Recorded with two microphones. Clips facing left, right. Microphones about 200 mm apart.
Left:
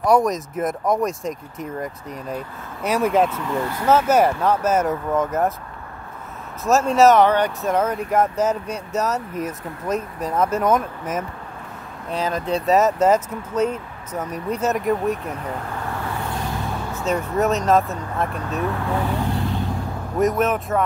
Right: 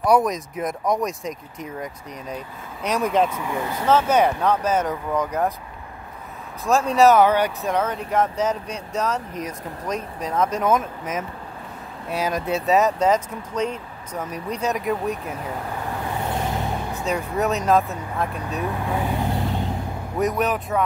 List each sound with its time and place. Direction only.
0.0 s speech: centre (ahead or behind)
2.8 s speech: 5° left (ahead or behind)
3.3 s speech: 10° right (ahead or behind)
3.8 s speech: 5° left (ahead or behind)
6.6 s speech: 5° left (ahead or behind)
7.6 s speech: 5° left (ahead or behind)
12.1 s speech: 10° right (ahead or behind)
16.3 s vehicle: 20° right (ahead or behind)
17.1 s speech: centre (ahead or behind)
18.4 s speech: 15° right (ahead or behind)
20.2 s speech: centre (ahead or behind)